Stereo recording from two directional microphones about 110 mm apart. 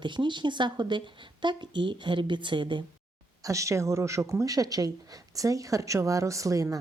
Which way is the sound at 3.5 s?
30° right (ahead or behind).